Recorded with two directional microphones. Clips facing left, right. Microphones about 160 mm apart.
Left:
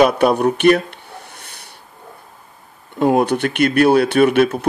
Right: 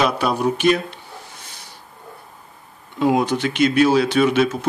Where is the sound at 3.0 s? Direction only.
55° left (ahead or behind).